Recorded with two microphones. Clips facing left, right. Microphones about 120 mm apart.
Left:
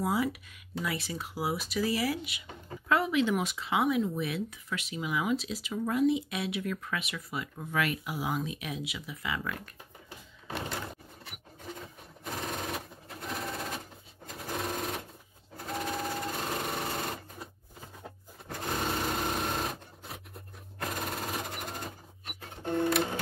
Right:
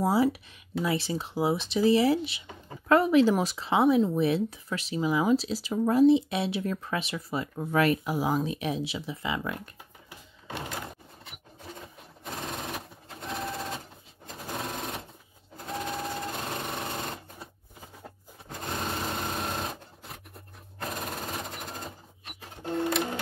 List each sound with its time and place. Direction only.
0.0 s speech: 30° right (ahead or behind)
2.9 s speech: 40° right (ahead or behind); by 9.6 s 25° right (ahead or behind)
11.8 s a sound: centre (ahead or behind)
12.5 s sewing machine: centre (ahead or behind)
18.7 s sewing machine: centre (ahead or behind)